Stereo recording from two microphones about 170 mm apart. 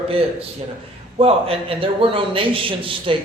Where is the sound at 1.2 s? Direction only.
35° right (ahead or behind).